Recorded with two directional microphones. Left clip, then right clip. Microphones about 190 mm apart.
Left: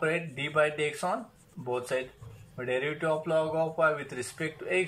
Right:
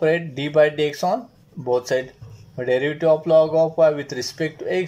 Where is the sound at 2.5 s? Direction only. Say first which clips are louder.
Right 10 dB; 40° right (ahead or behind).